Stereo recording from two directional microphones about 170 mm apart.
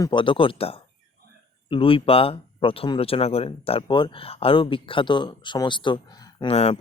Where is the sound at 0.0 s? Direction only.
30° left (ahead or behind).